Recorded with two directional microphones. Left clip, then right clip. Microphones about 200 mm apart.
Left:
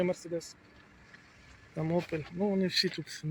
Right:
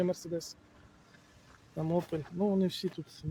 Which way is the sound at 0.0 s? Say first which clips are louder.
Left 1 dB; 15° right (ahead or behind).